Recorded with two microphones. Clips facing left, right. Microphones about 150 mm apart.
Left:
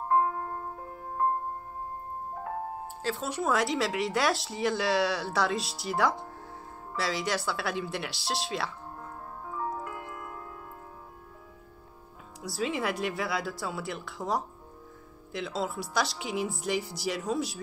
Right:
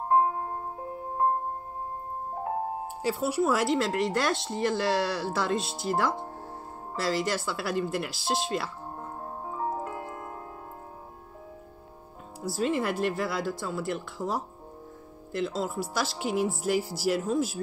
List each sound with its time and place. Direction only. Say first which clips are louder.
0.1 s music: right 2 dB; 20° right (ahead or behind)
2.3 s music: right 5 dB; 25° right (ahead or behind)
3.0 s speech: right 5 dB; 10° right (ahead or behind)
9.0 s music: right 5 dB; 30° right (ahead or behind)
12.4 s speech: right 3 dB; centre (ahead or behind)